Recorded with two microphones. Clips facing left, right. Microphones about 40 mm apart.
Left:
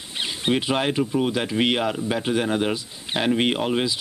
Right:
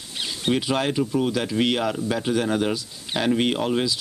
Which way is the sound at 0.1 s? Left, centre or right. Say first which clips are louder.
Left 1 dB; left.